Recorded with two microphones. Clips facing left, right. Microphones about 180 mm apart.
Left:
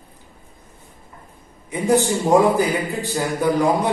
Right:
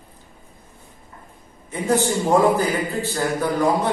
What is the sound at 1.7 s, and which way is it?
A man's voice, 15° left (ahead or behind).